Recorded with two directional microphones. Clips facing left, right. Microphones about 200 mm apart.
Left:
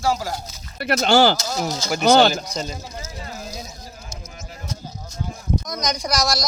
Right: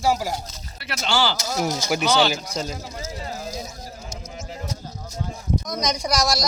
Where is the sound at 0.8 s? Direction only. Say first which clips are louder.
Left 8 dB; 50° left (ahead or behind).